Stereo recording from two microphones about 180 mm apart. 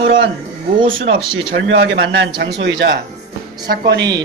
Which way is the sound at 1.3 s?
90° right.